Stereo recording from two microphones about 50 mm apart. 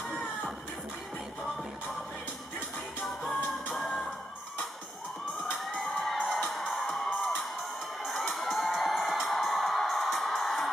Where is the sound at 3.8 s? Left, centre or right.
Centre.